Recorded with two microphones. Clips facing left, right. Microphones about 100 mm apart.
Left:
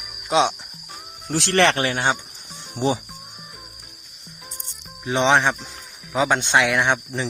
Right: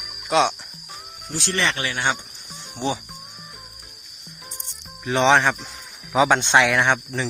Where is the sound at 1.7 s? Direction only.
35° left (ahead or behind).